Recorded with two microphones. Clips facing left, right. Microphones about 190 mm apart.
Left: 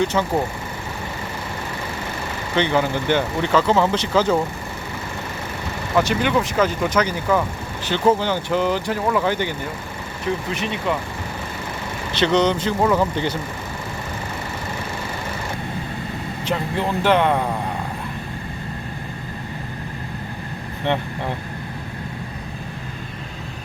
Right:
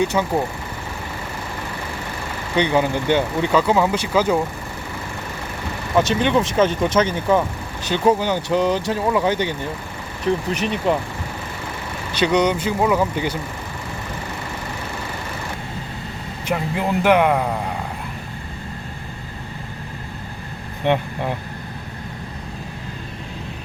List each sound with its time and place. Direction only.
0.0 s speech: 10° right (ahead or behind)
2.6 s speech: 15° right (ahead or behind)
6.0 s speech: 20° right (ahead or behind)
10.5 s speech: 40° right (ahead or behind)
12.1 s speech: 10° right (ahead or behind)
16.5 s speech: 10° right (ahead or behind)
20.8 s speech: 15° right (ahead or behind)